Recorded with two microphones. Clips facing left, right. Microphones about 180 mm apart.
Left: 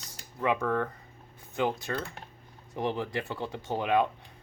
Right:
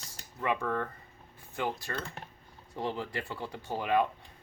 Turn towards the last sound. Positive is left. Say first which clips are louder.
# left 2 dB
turn(degrees=15)  # may be behind; listen again after turning